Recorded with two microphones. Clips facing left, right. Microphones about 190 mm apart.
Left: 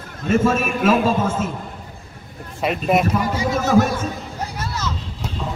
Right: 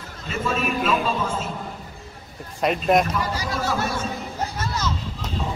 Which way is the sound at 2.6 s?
5° left (ahead or behind).